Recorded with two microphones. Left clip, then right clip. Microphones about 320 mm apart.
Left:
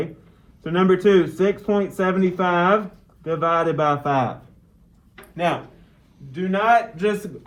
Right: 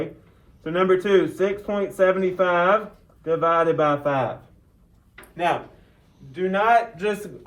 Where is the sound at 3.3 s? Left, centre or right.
Centre.